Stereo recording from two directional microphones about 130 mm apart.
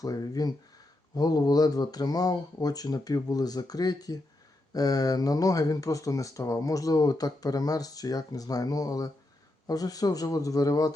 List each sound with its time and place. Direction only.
0.0 s speech: 30° left (ahead or behind)